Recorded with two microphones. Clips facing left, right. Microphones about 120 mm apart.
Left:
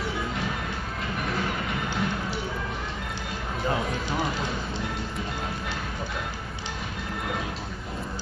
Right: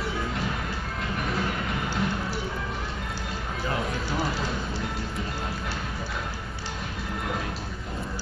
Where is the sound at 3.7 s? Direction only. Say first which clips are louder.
Left 2 dB; 20° left (ahead or behind).